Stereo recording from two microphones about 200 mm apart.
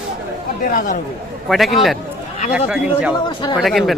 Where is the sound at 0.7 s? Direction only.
40° left (ahead or behind).